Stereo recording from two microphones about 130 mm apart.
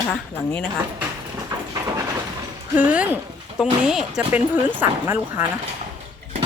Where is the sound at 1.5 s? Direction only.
30° right (ahead or behind).